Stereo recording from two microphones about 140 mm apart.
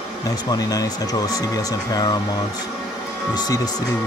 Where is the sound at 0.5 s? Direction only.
25° left (ahead or behind).